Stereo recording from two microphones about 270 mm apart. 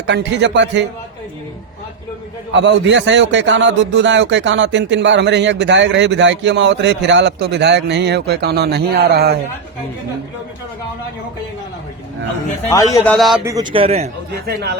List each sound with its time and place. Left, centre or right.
0.0 s a man's voice: right
2.5 s a man's voice: right
12.7 s a man's voice: centre
13.1 s a man's voice: centre
13.4 s a man's voice: centre
14.4 s a man's voice: right